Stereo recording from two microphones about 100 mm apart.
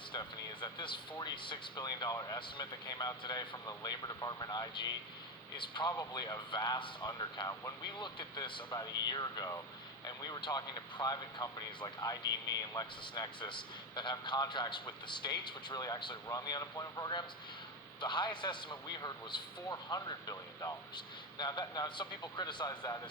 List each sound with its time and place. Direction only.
0.1 s speech: 50° left (ahead or behind)
6.0 s speech: 40° left (ahead or behind)
8.7 s speech: 40° left (ahead or behind)
18.0 s speech: 50° left (ahead or behind)
20.9 s speech: 45° left (ahead or behind)